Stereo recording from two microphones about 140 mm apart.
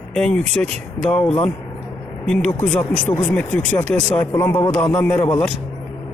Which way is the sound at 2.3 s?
10° left (ahead or behind).